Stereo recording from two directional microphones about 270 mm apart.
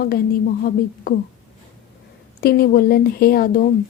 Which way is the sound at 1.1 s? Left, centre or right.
Left.